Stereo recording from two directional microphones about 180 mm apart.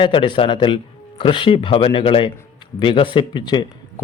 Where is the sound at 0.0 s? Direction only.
30° left (ahead or behind).